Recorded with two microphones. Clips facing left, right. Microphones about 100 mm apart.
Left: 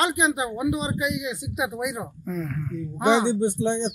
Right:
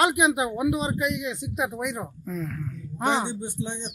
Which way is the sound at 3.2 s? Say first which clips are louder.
Left 10 dB; 65° left (ahead or behind).